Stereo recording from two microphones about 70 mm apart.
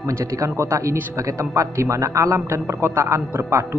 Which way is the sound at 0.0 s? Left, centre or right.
Right.